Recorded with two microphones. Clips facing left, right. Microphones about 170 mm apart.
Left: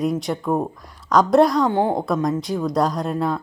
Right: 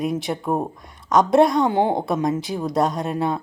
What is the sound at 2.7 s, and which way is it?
Speech, centre (ahead or behind).